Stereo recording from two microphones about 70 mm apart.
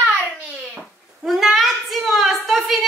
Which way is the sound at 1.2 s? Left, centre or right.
Centre.